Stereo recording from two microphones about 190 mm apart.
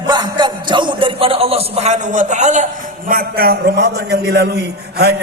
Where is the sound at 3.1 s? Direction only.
50° right (ahead or behind).